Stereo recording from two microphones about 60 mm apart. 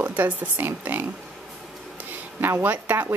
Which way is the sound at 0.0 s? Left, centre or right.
Right.